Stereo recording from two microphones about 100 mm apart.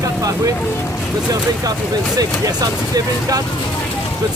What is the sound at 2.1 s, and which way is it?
Speech, 40° right (ahead or behind).